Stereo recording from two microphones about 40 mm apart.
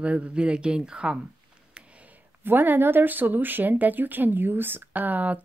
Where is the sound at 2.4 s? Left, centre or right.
Right.